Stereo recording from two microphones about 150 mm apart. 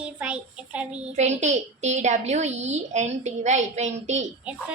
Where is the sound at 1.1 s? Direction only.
50° right (ahead or behind).